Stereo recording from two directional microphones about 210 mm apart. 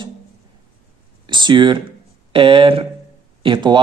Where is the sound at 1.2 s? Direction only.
20° right (ahead or behind).